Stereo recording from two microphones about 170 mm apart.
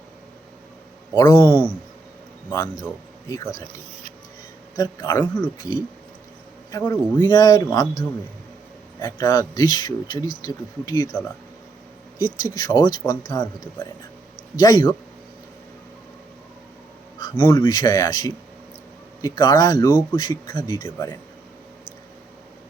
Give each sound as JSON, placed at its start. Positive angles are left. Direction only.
{"t": 1.1, "sound": "a man's voice", "side_deg": 20}
{"t": 2.8, "sound": "speech", "side_deg": 20}
{"t": 4.8, "sound": "a man's voice", "side_deg": 15}
{"t": 6.7, "sound": "a man's voice", "side_deg": 15}
{"t": 9.1, "sound": "a man's voice", "side_deg": 20}
{"t": 12.5, "sound": "a man's voice", "side_deg": 25}
{"t": 17.2, "sound": "insect", "side_deg": 25}
{"t": 17.6, "sound": "a man's voice", "side_deg": 25}
{"t": 20.8, "sound": "a man's voice", "side_deg": 15}